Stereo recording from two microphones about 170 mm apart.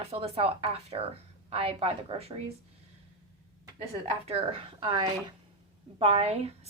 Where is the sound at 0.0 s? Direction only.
35° right (ahead or behind).